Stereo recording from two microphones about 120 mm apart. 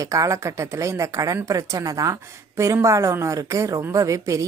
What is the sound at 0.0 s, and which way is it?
A woman's voice, 25° right (ahead or behind).